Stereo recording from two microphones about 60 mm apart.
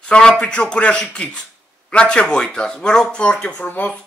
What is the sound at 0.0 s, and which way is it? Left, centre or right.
Speech, centre.